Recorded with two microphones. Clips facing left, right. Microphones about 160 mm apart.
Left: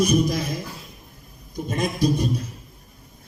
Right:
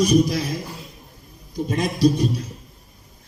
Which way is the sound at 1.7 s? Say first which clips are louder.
Right 3 dB; 50° left (ahead or behind).